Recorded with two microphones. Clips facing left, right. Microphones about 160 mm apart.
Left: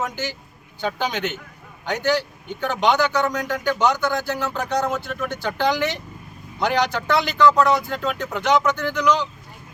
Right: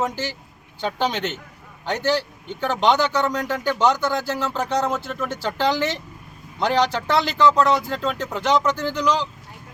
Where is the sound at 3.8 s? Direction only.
30° right (ahead or behind).